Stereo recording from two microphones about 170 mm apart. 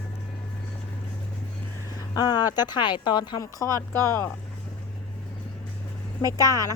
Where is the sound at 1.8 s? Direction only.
25° left (ahead or behind).